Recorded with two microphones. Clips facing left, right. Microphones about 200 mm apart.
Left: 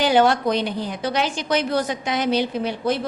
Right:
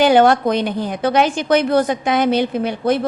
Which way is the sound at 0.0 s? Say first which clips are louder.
Right 5 dB; 55° right (ahead or behind).